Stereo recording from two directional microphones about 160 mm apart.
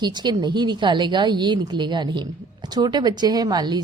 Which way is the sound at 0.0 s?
25° right (ahead or behind).